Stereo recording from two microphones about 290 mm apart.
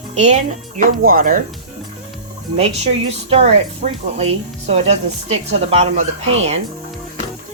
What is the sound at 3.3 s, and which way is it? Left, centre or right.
Speech, right.